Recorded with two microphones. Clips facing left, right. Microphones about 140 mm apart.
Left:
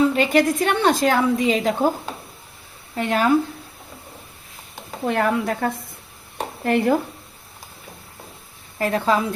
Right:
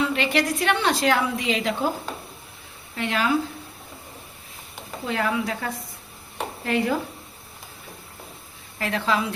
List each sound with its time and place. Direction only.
0.0 s a woman's voice: 45° left (ahead or behind)
2.9 s speech: 45° left (ahead or behind)
5.0 s a woman's voice: 50° left (ahead or behind)
6.3 s a sound: 50° left (ahead or behind)
8.8 s a woman's voice: 45° left (ahead or behind)